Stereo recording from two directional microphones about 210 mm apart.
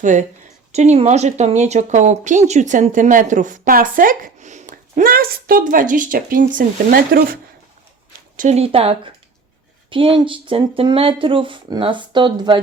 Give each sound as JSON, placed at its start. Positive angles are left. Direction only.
{"t": 0.0, "sound": "speech", "side_deg": -35}
{"t": 8.4, "sound": "speech", "side_deg": -30}